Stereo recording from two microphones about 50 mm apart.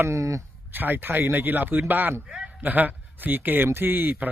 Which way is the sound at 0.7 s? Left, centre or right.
Right.